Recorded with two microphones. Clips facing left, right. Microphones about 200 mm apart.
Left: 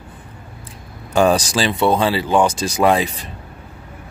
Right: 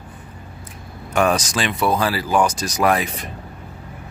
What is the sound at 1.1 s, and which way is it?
Speech, 30° left (ahead or behind).